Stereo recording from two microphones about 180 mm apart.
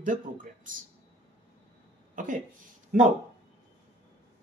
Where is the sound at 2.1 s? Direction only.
45° right (ahead or behind).